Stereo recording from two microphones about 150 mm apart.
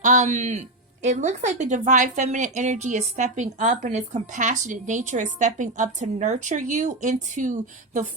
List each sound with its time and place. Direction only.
0.0 s a man's voice: 55° right (ahead or behind)